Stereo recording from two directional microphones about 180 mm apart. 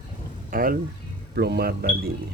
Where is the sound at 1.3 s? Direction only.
65° right (ahead or behind).